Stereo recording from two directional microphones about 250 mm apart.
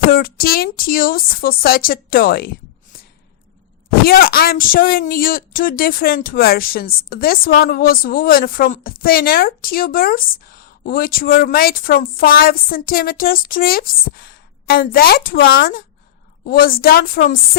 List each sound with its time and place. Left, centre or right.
0.1 s a woman's voice: left
4.0 s a woman's voice: left